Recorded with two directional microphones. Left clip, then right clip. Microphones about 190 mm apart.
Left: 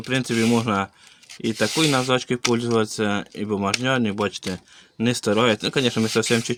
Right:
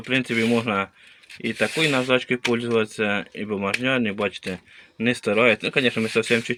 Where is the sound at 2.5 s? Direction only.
85° left.